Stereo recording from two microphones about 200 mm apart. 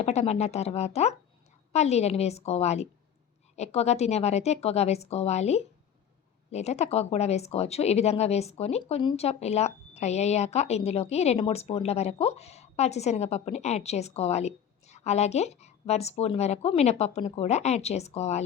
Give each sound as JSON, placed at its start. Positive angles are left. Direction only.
{"t": 0.0, "sound": "a woman's voice", "side_deg": 35}